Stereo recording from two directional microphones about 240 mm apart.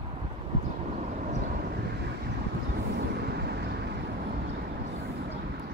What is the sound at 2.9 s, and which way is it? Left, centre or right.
Vehicle, right.